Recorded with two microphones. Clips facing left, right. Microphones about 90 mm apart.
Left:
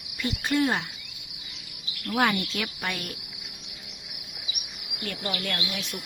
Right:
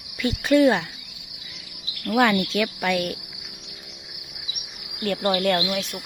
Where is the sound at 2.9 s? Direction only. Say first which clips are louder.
Right 10 dB; 90° right.